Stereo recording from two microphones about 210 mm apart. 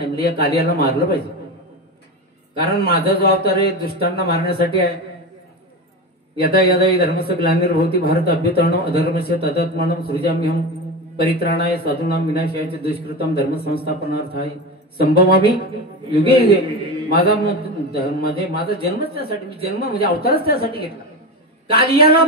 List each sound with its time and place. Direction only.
0.0 s a man's voice: 45° left (ahead or behind)
2.8 s a man's voice: 45° left (ahead or behind)
6.4 s a man's voice: 45° left (ahead or behind)